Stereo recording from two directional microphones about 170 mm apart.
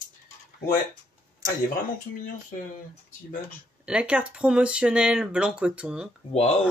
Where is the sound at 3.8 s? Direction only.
5° right (ahead or behind).